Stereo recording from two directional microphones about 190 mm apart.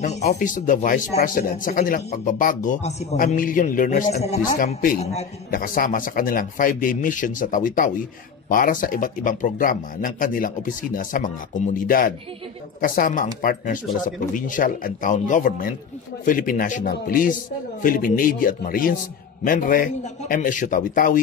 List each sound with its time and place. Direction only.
0.0 s speech: 35° left (ahead or behind)